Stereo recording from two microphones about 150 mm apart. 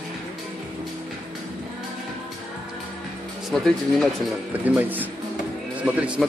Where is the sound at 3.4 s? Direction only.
Centre (ahead or behind).